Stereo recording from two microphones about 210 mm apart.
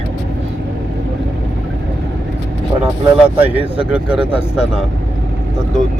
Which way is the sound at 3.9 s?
5° right (ahead or behind).